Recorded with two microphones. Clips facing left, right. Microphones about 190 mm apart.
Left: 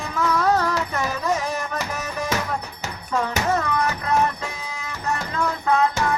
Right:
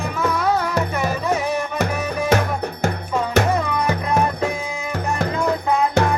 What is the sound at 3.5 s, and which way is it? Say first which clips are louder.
Music: right 1 dB; 15° right (ahead or behind).